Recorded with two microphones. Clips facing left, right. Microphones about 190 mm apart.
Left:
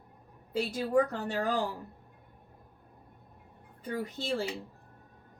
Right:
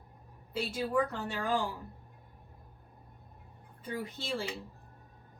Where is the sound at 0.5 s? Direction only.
40° left (ahead or behind).